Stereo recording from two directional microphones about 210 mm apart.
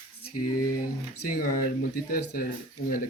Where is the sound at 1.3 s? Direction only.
40° left (ahead or behind).